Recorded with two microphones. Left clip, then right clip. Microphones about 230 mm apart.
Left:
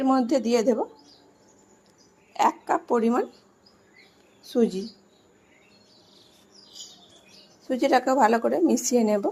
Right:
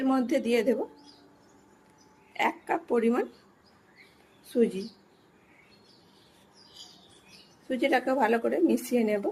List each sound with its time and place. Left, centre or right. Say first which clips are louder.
0.0 s a woman's voice: left 4 dB; centre
2.4 s a woman's voice: left 6 dB; centre
4.5 s a woman's voice: left 2 dB; centre
7.7 s a woman's voice: left 5 dB; centre